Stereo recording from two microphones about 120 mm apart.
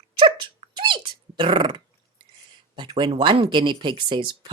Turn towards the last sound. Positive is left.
turn(degrees=-40)  # may be behind; listen again after turning